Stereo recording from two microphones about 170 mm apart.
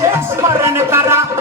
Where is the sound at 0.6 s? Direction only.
15° right (ahead or behind).